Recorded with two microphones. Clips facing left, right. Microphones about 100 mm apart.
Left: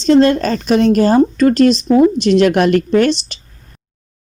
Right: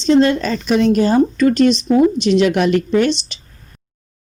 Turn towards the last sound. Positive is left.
turn(degrees=50)  # may be behind; listen again after turning